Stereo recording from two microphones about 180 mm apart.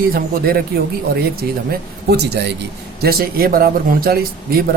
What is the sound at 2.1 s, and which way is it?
Speech, 65° right (ahead or behind).